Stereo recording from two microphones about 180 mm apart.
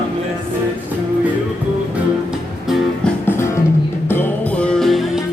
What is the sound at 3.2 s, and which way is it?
Music, 15° left (ahead or behind).